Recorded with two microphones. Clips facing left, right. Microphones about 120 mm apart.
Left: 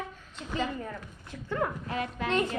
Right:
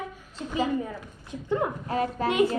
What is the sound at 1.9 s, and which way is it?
Speech, 35° right (ahead or behind).